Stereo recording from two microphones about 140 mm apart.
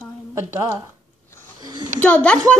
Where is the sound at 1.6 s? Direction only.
30° right (ahead or behind).